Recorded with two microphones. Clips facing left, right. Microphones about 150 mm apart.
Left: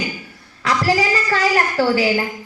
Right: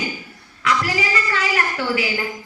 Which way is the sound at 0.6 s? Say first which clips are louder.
Left 4 dB; 35° left (ahead or behind).